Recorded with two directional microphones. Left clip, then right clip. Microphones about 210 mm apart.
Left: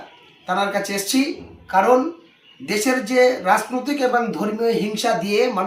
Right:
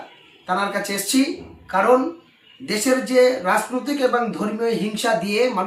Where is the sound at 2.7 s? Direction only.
15° left (ahead or behind).